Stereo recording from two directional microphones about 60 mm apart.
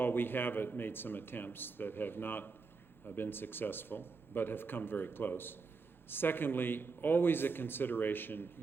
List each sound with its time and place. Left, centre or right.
0.0 s speech: left